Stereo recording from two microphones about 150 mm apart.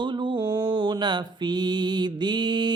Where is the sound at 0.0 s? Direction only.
30° right (ahead or behind).